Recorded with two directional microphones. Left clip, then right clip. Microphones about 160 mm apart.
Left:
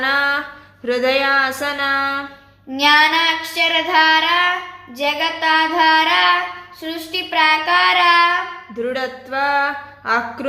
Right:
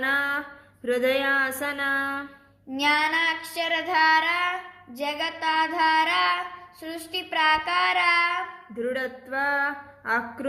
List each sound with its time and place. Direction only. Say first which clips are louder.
0.0 s a sound: left 8 dB; 25° right (ahead or behind)
0.9 s speech: left 7 dB; 20° right (ahead or behind)
2.7 s child singing: left 9 dB; 40° right (ahead or behind)
8.8 s speech: left 6 dB; 25° right (ahead or behind)